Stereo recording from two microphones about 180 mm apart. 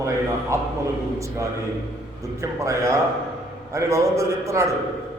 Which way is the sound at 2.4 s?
15° right (ahead or behind).